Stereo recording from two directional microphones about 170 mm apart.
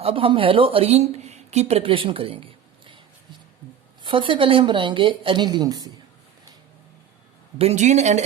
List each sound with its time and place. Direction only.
0.0 s speech: 30° right (ahead or behind)
4.0 s a woman's voice: 30° right (ahead or behind)
7.6 s speech: 40° right (ahead or behind)